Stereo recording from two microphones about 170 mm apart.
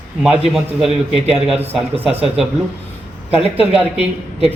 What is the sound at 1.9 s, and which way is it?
Speech, 35° right (ahead or behind).